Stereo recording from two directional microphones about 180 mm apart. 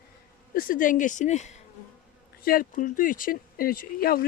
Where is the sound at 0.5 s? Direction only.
50° left (ahead or behind).